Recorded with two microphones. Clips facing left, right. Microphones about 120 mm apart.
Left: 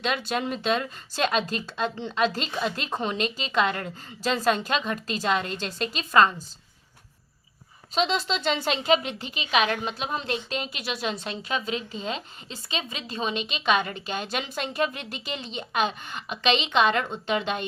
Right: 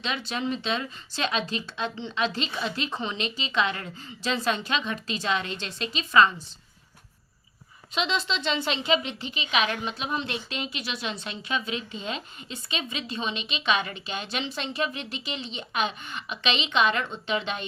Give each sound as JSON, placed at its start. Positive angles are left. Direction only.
{"t": 0.0, "sound": "speech", "side_deg": 50}
{"t": 7.9, "sound": "speech", "side_deg": 40}